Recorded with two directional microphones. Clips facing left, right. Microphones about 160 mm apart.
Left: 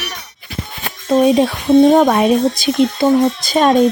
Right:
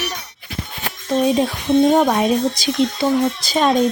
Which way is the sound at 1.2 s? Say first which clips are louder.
Left 4 dB; 70° left (ahead or behind).